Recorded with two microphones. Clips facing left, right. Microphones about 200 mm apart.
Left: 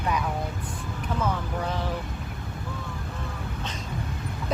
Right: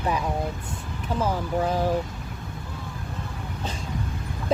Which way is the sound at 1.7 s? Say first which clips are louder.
Right 8 dB; 40° right (ahead or behind).